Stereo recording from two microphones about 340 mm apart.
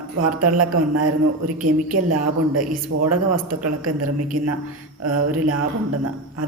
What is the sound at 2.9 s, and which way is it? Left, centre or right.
Speech, right.